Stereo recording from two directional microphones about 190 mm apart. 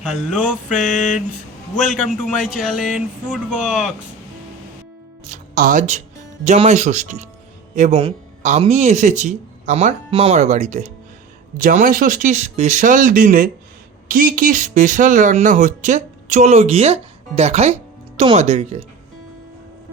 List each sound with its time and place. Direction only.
0.0 s speech: centre (ahead or behind)
0.9 s a sound: 40° left (ahead or behind)
1.8 s speech: centre (ahead or behind)
5.3 s speech: 45° right (ahead or behind)